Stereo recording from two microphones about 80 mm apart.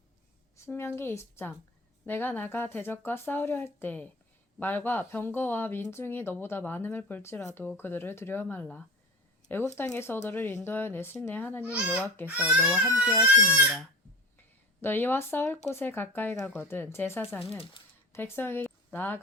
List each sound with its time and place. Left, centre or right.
0.6 s speech: left
11.6 s a child's voice: centre
12.0 s speech: left
12.3 s a child's voice: centre
14.8 s speech: left